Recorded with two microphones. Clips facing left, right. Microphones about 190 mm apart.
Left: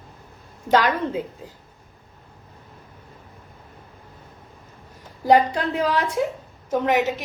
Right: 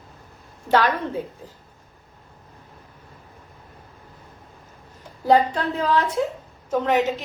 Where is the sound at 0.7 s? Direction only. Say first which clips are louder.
Left 1 dB; 15° left (ahead or behind).